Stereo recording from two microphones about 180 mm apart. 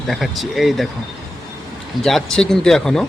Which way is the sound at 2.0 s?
Centre (ahead or behind).